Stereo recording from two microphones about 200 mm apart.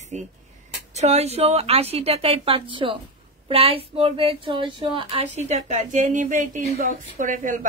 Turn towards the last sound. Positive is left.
turn(degrees=-40)  # may be behind; listen again after turning